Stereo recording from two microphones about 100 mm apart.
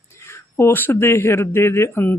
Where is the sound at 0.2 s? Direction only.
25° left (ahead or behind).